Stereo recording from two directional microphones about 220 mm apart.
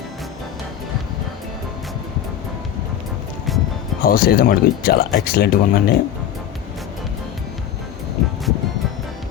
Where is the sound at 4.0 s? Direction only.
40° left (ahead or behind).